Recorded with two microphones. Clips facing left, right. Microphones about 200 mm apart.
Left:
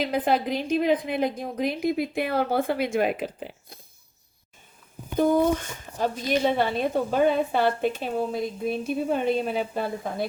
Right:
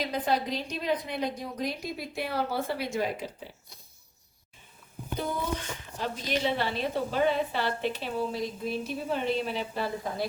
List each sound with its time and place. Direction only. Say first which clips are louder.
0.0 s a woman's voice: left 5 dB; 55° left (ahead or behind)
5.1 s a woman's voice: left 11 dB; 50° left (ahead or behind)